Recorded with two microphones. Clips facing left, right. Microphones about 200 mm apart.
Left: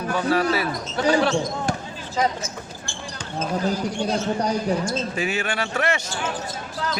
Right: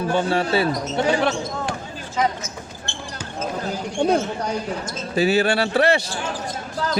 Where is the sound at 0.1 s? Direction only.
30° right (ahead or behind).